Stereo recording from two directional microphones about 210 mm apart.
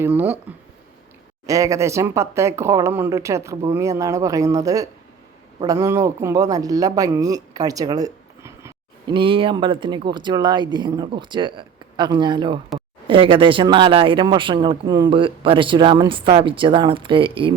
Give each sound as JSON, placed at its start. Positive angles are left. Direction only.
{"t": 0.0, "sound": "speech", "side_deg": -10}
{"t": 1.5, "sound": "speech", "side_deg": -15}
{"t": 9.1, "sound": "speech", "side_deg": -25}